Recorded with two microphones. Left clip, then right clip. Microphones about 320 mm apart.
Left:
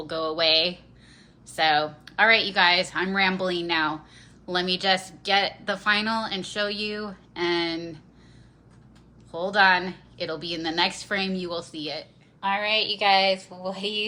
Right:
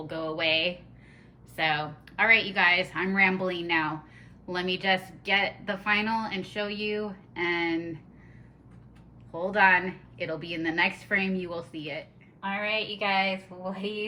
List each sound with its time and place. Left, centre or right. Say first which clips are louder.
0.1 s a woman's voice: left 5 dB; centre
9.3 s a woman's voice: left 2 dB; centre